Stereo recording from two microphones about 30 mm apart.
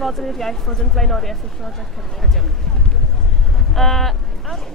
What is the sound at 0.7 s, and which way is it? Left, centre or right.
Speech, centre.